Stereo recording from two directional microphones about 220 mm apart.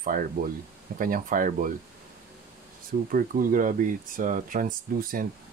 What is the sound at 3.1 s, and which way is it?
Speech, 40° right (ahead or behind).